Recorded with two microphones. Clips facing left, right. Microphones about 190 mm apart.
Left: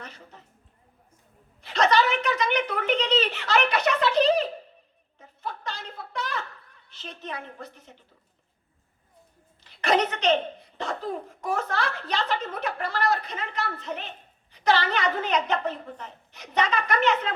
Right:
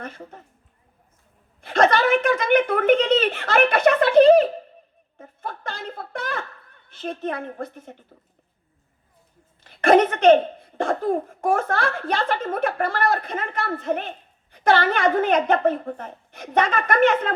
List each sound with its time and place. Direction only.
0.0 s speech: 50° right (ahead or behind)
1.6 s speech: 50° right (ahead or behind)
9.6 s speech: 50° right (ahead or behind)